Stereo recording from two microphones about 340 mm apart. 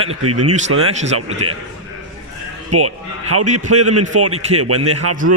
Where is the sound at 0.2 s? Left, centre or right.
Right.